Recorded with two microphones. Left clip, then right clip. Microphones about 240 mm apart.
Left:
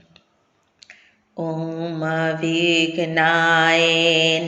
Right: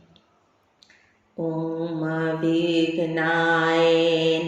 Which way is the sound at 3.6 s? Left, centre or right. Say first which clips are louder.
Left 3 dB; left.